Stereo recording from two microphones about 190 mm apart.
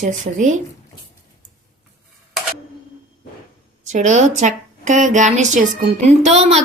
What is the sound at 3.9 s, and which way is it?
A woman's voice, 40° right (ahead or behind).